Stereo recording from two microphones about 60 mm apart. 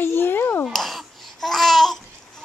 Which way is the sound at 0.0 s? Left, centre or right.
Left.